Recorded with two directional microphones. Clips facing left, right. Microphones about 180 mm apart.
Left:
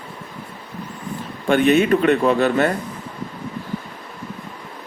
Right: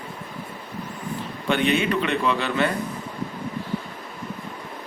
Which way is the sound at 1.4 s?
45° left (ahead or behind).